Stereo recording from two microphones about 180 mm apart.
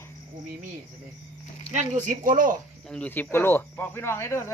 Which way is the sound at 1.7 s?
40° right (ahead or behind).